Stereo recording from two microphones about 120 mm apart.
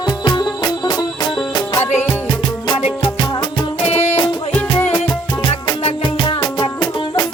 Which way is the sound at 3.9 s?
65° left (ahead or behind).